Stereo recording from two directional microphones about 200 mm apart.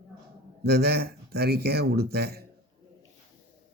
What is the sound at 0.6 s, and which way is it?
Speech, 50° right (ahead or behind).